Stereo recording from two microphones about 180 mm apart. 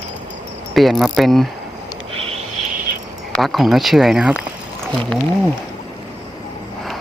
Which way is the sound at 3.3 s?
Centre (ahead or behind).